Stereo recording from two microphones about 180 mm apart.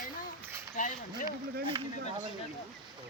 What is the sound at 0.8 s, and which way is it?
Speech, 45° left (ahead or behind).